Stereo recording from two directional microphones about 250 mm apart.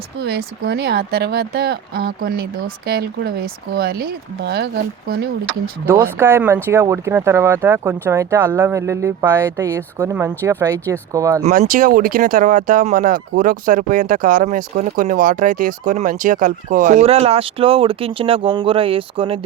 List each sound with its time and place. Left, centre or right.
0.2 s speech: right
5.8 s speech: centre
11.4 s speech: right